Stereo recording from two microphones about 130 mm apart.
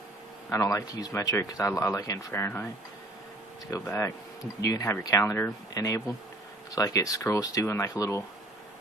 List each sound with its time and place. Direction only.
0.5 s speech: 25° left (ahead or behind)
4.6 s speech: 25° left (ahead or behind)